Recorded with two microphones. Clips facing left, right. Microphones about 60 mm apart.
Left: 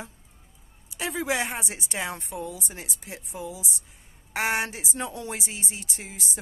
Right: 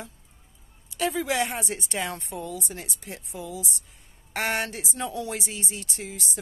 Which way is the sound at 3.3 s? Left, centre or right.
Centre.